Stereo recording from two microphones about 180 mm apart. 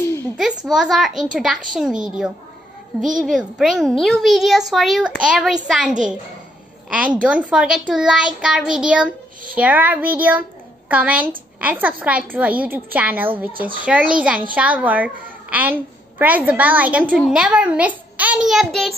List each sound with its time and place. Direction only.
0.7 s a child's voice: centre (ahead or behind)